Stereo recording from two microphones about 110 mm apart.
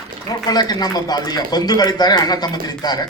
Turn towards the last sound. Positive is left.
turn(degrees=40)  # may be behind; listen again after turning